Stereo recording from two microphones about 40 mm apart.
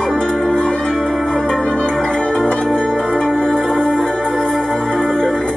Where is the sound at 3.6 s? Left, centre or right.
Centre.